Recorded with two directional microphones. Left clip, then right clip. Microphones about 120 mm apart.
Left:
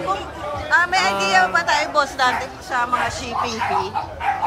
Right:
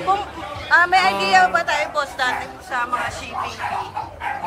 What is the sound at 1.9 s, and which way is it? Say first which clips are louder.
Speech: left 3 dB; 20° left (ahead or behind).